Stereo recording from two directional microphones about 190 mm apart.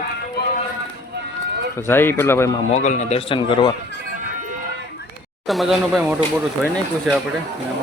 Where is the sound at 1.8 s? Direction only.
10° left (ahead or behind).